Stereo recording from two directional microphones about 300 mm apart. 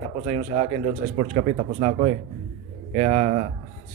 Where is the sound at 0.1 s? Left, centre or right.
Right.